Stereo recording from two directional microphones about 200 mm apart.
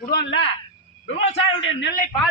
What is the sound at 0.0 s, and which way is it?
Speech, 50° left (ahead or behind).